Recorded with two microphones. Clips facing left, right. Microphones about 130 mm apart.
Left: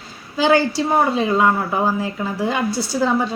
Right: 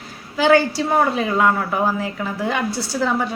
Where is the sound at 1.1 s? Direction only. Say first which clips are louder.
Left 1 dB; 20° left (ahead or behind).